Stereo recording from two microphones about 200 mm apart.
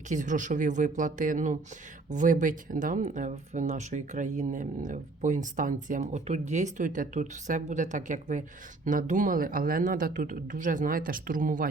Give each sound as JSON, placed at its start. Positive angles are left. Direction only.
{"t": 0.1, "sound": "speech", "side_deg": -40}